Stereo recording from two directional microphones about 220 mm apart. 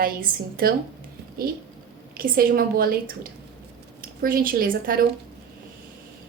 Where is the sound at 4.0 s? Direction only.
40° right (ahead or behind).